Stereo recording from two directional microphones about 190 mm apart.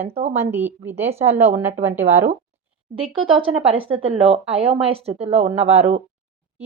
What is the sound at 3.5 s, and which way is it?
A woman's voice, 30° right (ahead or behind).